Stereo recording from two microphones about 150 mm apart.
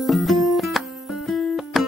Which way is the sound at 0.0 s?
Centre (ahead or behind).